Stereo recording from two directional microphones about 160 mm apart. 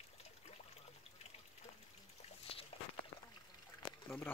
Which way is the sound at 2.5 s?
35° left (ahead or behind).